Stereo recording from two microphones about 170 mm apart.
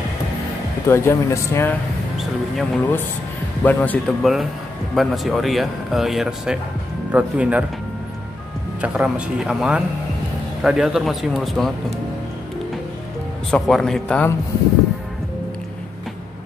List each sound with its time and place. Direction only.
0.8 s speech: 15° left (ahead or behind)
2.1 s music: centre (ahead or behind)
3.6 s speech: 10° left (ahead or behind); by 7.6 s 10° right (ahead or behind)
8.8 s speech: 5° right (ahead or behind)
13.5 s speech: centre (ahead or behind)